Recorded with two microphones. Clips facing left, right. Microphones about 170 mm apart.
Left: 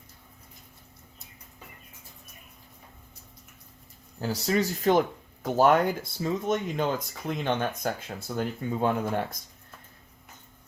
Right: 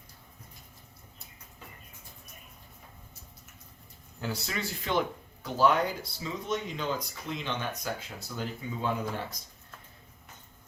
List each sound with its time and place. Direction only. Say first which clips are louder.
4.2 s speech: left 8 dB; 35° left (ahead or behind); by 9.4 s 55° left (ahead or behind)